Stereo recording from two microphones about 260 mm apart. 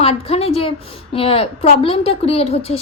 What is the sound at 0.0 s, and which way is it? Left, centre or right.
A woman's voice, left.